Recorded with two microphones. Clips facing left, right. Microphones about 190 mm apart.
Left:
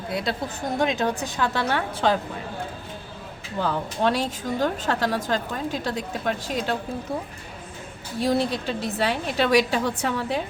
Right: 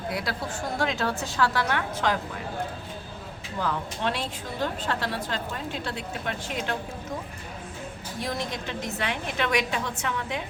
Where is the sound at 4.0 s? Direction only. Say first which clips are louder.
Left 6 dB; 40° left (ahead or behind).